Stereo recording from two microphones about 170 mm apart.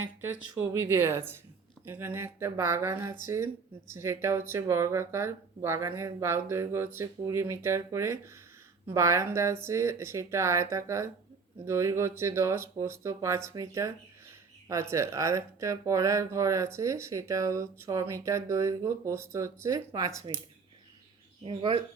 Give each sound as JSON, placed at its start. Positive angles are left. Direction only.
{"t": 0.6, "sound": "speech", "side_deg": -20}
{"t": 21.4, "sound": "speech", "side_deg": -30}